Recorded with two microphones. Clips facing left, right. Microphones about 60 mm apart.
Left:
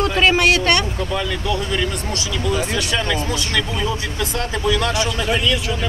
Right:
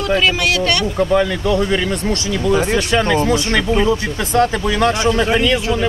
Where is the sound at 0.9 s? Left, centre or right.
Right.